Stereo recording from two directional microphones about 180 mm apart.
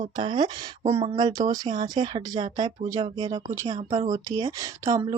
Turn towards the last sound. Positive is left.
turn(degrees=-20)  # may be behind; listen again after turning